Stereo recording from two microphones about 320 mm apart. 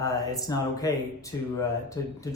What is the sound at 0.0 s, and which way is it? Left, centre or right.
Speech, centre.